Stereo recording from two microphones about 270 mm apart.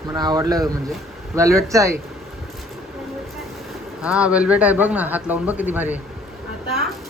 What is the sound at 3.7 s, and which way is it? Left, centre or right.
Speech, centre.